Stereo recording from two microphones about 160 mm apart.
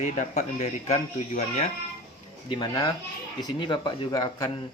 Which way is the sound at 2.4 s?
30° left (ahead or behind).